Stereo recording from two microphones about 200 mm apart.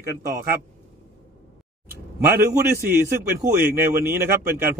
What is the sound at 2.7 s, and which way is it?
A man's voice, 10° right (ahead or behind).